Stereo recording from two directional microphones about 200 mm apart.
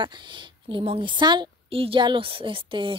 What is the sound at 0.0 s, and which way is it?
A woman's voice, 20° right (ahead or behind).